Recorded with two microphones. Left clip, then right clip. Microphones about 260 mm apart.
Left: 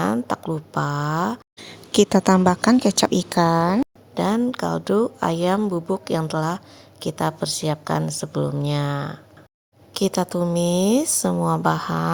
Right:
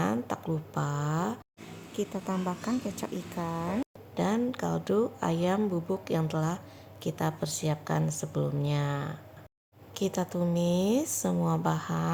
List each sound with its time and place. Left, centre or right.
0.0 s a woman's voice: left
1.9 s a woman's voice: left